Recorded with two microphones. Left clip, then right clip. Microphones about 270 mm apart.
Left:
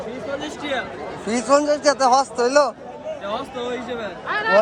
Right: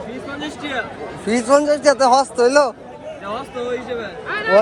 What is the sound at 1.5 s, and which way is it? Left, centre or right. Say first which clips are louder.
Speech: right 3 dB; centre.